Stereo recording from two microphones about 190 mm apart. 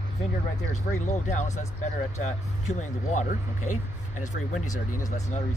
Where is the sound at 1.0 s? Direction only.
40° left (ahead or behind).